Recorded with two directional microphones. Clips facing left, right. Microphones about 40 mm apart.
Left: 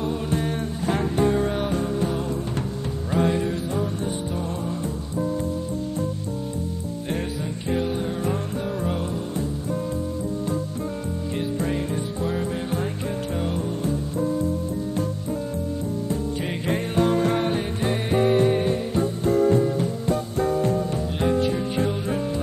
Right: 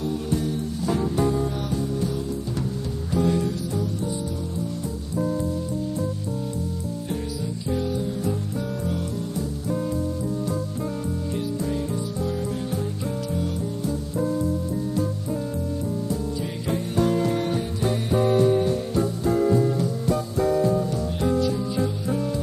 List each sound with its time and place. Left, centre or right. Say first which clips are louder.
0.0 s music: left 1 dB; left
7.1 s music: left 3 dB; left
11.3 s music: left 3 dB; left
16.1 s music: left 1 dB; left